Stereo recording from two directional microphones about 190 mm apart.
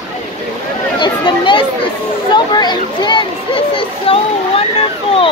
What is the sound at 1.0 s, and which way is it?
Chatter, 25° left (ahead or behind).